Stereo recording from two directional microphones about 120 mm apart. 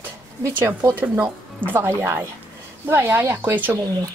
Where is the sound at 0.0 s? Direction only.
15° right (ahead or behind).